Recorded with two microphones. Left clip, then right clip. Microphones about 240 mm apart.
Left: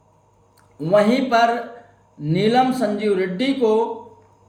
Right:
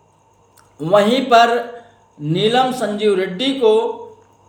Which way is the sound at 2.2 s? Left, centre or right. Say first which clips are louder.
Right 3 dB; right.